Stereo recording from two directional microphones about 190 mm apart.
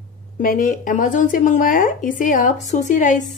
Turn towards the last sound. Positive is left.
turn(degrees=40)  # may be behind; listen again after turning